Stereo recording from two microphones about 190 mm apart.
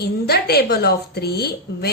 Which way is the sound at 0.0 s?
55° left (ahead or behind).